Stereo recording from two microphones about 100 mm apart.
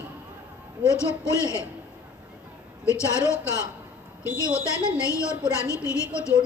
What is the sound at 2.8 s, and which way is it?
Speech, 30° left (ahead or behind).